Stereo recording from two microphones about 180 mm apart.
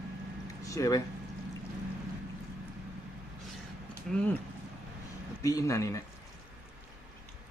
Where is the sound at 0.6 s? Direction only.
20° left (ahead or behind).